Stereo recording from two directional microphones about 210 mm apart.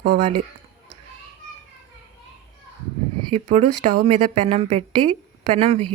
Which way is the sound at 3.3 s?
30° right (ahead or behind).